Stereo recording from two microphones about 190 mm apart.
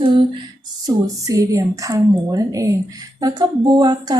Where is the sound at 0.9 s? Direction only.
20° right (ahead or behind).